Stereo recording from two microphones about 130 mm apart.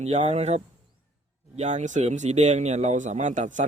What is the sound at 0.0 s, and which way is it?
Speech, 55° right (ahead or behind).